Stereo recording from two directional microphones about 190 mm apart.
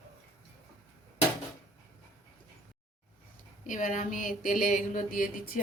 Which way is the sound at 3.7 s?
40° left (ahead or behind).